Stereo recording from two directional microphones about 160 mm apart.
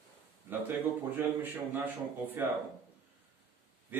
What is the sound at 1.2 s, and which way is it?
Speech, 10° right (ahead or behind).